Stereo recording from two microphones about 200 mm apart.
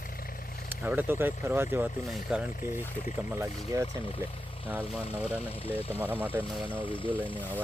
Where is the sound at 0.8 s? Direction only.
10° right (ahead or behind).